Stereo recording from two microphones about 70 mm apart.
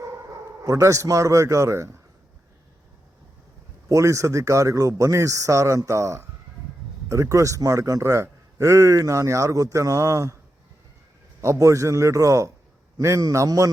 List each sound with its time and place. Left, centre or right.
0.6 s a man's voice: right
3.8 s a man's voice: right
11.3 s a man's voice: right